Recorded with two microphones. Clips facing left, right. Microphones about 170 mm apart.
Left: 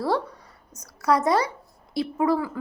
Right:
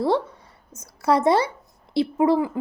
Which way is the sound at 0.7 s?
25° right (ahead or behind).